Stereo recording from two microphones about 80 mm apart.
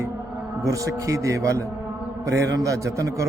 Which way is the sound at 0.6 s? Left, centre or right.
Right.